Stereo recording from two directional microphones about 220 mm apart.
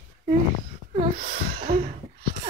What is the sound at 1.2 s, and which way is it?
Speech, 40° right (ahead or behind).